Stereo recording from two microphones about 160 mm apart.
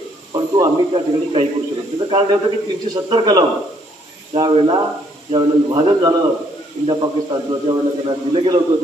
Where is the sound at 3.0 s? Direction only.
25° right (ahead or behind).